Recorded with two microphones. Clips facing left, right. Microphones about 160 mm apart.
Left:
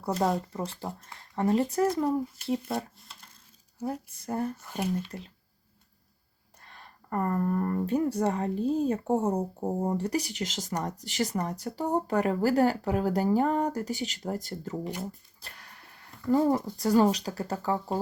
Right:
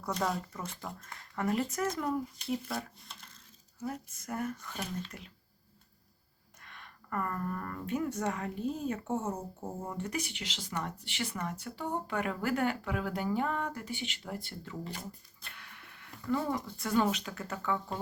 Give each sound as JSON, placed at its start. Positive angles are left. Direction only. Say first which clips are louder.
{"t": 0.0, "sound": "speech", "louder": "left 6 dB", "side_deg": 30}
{"t": 3.1, "sound": "a sound", "louder": "even", "side_deg": 0}
{"t": 3.8, "sound": "speech", "louder": "left 5 dB", "side_deg": 30}
{"t": 6.6, "sound": "speech", "louder": "left 2 dB", "side_deg": 35}
{"t": 15.4, "sound": "a sound", "louder": "left 2 dB", "side_deg": 35}
{"t": 16.6, "sound": "speech", "louder": "left 7 dB", "side_deg": 35}